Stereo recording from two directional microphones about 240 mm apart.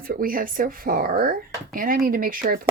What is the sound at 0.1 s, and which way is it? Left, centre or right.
Speech, right.